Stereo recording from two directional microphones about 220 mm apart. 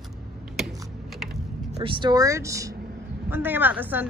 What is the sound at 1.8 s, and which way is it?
Speech, 20° right (ahead or behind).